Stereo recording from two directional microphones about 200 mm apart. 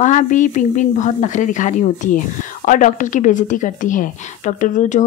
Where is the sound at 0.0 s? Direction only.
40° left (ahead or behind).